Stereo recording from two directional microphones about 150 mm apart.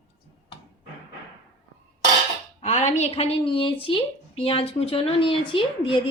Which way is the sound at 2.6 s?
50° left (ahead or behind).